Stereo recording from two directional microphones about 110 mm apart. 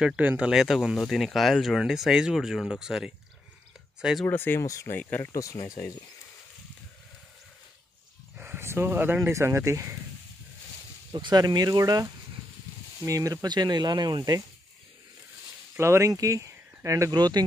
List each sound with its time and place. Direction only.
0.0 s speech: 10° right (ahead or behind)
0.5 s speech: centre (ahead or behind)
4.3 s speech: 20° left (ahead or behind)
4.6 s speech: 30° left (ahead or behind)
4.9 s speech: 15° left (ahead or behind)
5.3 s speech: 30° left (ahead or behind)
8.4 s speech: 20° right (ahead or behind)
11.1 s speech: 40° right (ahead or behind)
15.8 s speech: 25° right (ahead or behind)